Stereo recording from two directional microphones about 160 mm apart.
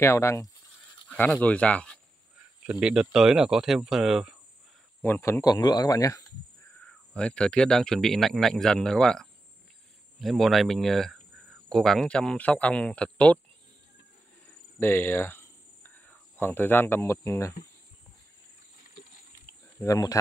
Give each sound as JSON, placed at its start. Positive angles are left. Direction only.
{"t": 0.0, "sound": "speech", "side_deg": 15}
{"t": 2.6, "sound": "speech", "side_deg": -5}
{"t": 5.0, "sound": "speech", "side_deg": 15}
{"t": 6.8, "sound": "speech", "side_deg": 5}
{"t": 14.8, "sound": "speech", "side_deg": 15}
{"t": 19.8, "sound": "speech", "side_deg": 20}